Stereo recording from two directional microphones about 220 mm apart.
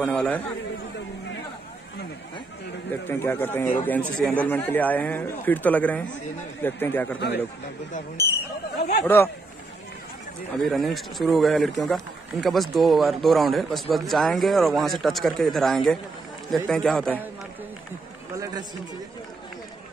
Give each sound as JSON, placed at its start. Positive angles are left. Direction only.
{"t": 0.0, "sound": "a man's voice", "side_deg": 5}
{"t": 2.9, "sound": "a man's voice", "side_deg": 10}
{"t": 7.2, "sound": "a man's voice", "side_deg": 50}
{"t": 9.0, "sound": "a man's voice", "side_deg": 10}
{"t": 10.6, "sound": "speech", "side_deg": 0}
{"t": 18.3, "sound": "run", "side_deg": -15}